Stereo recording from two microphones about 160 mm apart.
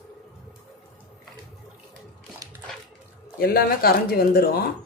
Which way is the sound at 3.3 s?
70° left (ahead or behind).